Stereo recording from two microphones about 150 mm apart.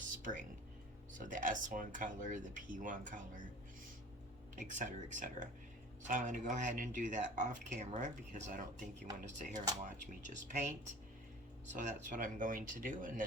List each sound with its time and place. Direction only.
0.2 s speech: 60° right (ahead or behind)
4.5 s speech: 60° right (ahead or behind)
11.8 s speech: 60° right (ahead or behind)